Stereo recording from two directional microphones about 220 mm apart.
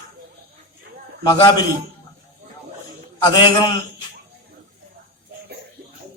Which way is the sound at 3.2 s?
20° left (ahead or behind).